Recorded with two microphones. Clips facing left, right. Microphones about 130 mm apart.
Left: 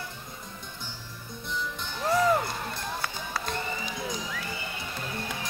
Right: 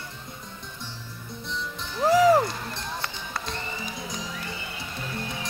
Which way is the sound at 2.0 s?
90° right.